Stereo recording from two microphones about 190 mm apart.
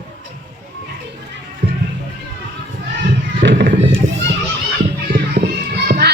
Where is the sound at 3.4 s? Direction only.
65° right (ahead or behind).